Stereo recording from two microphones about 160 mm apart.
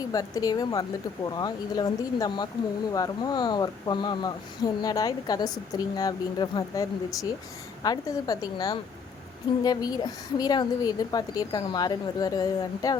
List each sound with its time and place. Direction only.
0.1 s speech: 25° left (ahead or behind)